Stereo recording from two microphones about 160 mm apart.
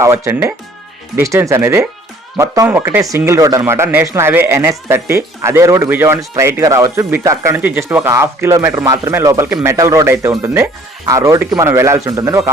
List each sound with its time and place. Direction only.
0.0 s speech: 15° right (ahead or behind)